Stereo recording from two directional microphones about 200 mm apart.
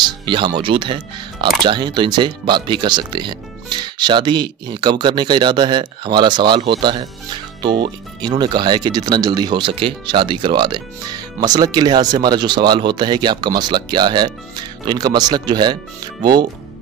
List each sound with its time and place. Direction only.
0.0 s music: 25° right (ahead or behind)
0.6 s speech: 25° right (ahead or behind)